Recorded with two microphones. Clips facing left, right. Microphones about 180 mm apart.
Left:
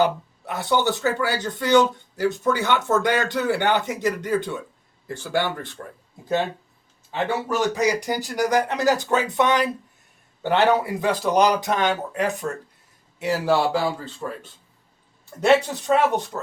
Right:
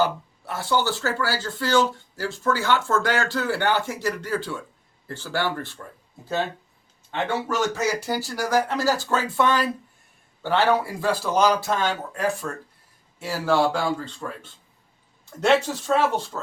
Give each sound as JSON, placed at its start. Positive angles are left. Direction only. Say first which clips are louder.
{"t": 0.4, "sound": "speech", "louder": "left 2 dB", "side_deg": 20}
{"t": 7.1, "sound": "a man's voice", "louder": "left 1 dB", "side_deg": 5}
{"t": 7.7, "sound": "a man's voice", "louder": "left 3 dB", "side_deg": 15}